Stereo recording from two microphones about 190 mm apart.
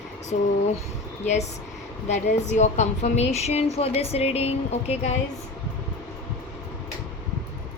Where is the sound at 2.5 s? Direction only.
35° left (ahead or behind).